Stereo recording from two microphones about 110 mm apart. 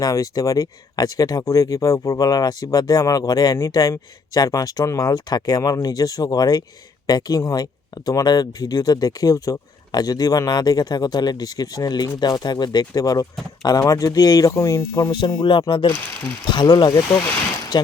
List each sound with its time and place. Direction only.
0.0 s speech: 35° left (ahead or behind)
15.4 s speech: 50° left (ahead or behind)